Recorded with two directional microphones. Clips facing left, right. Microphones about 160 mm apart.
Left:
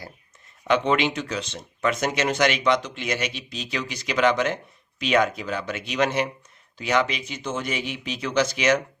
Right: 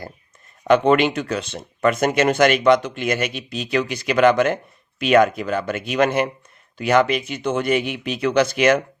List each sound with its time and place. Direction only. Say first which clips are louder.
0.7 s speech: right 6 dB; 55° right (ahead or behind)